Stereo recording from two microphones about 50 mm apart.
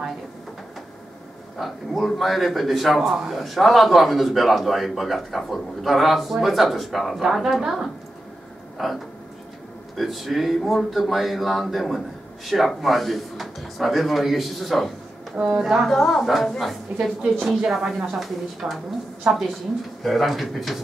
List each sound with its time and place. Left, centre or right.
1.6 s a man's voice: centre
15.9 s a man's voice: centre